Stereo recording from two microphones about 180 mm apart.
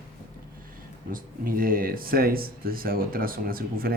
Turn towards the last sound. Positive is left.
turn(degrees=-55)  # may be behind; listen again after turning